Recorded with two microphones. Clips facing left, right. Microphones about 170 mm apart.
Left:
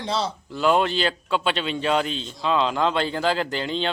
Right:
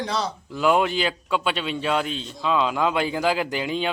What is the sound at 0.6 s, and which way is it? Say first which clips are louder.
A man's voice: even; 10° right (ahead or behind).